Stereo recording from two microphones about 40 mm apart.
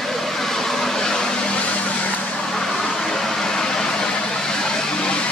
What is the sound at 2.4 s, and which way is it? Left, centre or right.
Vehicle, centre.